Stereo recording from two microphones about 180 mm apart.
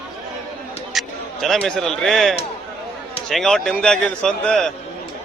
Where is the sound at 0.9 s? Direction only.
Centre (ahead or behind).